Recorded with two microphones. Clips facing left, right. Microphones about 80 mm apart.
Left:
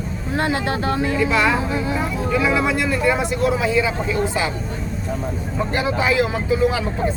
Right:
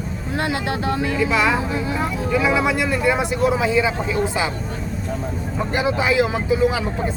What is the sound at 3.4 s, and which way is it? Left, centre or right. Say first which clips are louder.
Speech: right 1 dB; right.